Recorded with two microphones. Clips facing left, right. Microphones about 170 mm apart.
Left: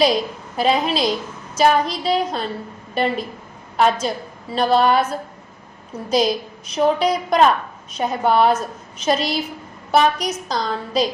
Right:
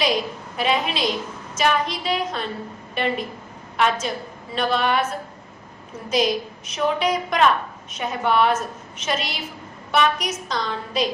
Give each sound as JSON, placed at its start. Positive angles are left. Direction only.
{"t": 0.5, "sound": "a woman's voice", "side_deg": 35}
{"t": 6.1, "sound": "a woman's voice", "side_deg": 35}